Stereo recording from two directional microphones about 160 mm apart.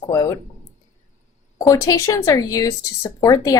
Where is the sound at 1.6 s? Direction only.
20° left (ahead or behind).